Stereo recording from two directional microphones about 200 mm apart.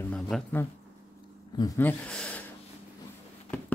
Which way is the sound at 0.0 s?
5° left (ahead or behind).